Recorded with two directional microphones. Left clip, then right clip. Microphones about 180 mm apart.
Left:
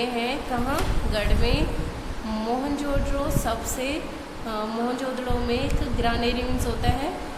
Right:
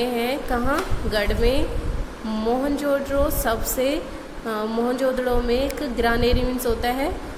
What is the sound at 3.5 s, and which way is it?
Speech, 30° right (ahead or behind).